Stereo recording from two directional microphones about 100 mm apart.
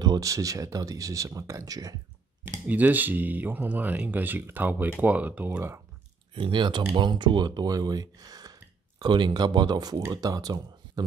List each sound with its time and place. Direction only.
0.0 s speech: 40° right (ahead or behind)
2.6 s speech: 15° right (ahead or behind)
6.3 s speech: 50° right (ahead or behind)